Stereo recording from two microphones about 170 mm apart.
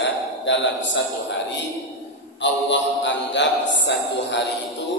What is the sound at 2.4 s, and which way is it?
A man's voice, 90° left.